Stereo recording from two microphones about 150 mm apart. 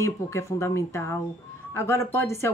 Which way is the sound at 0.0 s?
20° left (ahead or behind).